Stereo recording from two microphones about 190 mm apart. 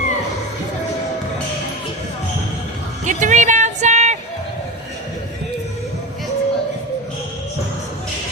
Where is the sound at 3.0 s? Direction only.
40° right (ahead or behind).